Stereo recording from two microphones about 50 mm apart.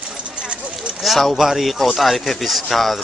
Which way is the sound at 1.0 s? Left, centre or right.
Centre.